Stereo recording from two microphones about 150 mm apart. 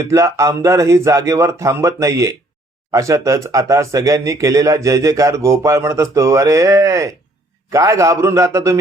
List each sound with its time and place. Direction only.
0.0 s speech: 20° right (ahead or behind)